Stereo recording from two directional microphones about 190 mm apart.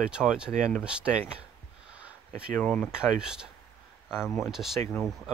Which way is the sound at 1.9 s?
5° right (ahead or behind).